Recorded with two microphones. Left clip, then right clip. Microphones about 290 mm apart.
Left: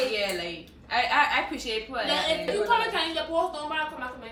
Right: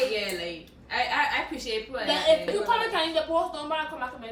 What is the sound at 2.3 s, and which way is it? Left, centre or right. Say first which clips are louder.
A woman's voice: right 4 dB; right.